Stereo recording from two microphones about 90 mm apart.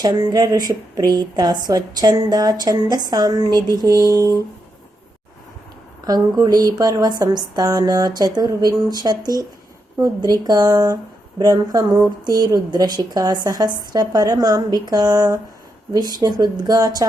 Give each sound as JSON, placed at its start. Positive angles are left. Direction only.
{"t": 0.0, "sound": "speech", "side_deg": -50}
{"t": 6.1, "sound": "speech", "side_deg": -45}